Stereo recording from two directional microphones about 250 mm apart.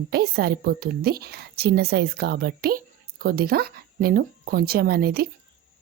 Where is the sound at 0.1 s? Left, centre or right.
Right.